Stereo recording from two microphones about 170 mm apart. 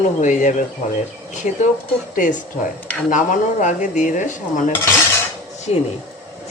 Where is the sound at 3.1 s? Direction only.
50° left (ahead or behind).